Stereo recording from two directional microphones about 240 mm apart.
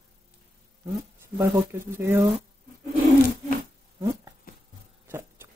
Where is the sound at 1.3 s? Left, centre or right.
Centre.